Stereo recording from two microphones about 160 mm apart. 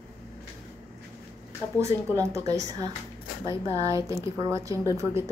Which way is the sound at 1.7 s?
20° right (ahead or behind).